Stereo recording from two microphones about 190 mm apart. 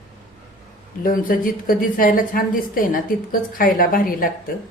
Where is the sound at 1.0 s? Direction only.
45° left (ahead or behind).